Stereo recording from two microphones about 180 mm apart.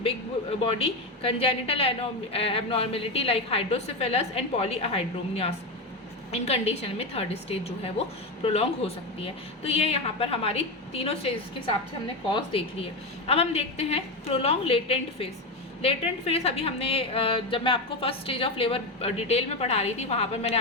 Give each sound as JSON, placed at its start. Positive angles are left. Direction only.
{"t": 0.6, "sound": "a woman's voice", "side_deg": 30}